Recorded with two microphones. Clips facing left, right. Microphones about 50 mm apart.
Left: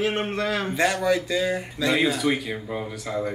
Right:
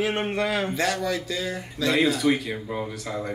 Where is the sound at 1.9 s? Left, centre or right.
Centre.